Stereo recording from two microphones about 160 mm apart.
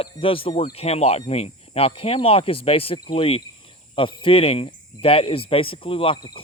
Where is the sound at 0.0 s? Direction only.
35° left (ahead or behind).